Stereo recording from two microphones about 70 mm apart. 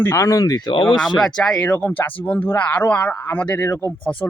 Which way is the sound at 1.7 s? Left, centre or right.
Left.